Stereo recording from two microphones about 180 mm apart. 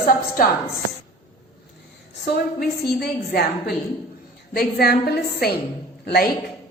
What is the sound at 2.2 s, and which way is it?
A woman's voice, 60° left (ahead or behind).